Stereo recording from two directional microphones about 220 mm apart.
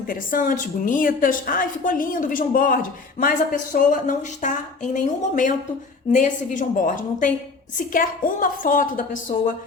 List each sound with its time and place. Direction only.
0.1 s a woman's voice: 40° left (ahead or behind)